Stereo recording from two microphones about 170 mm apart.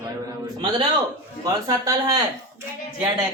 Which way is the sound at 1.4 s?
20° right (ahead or behind).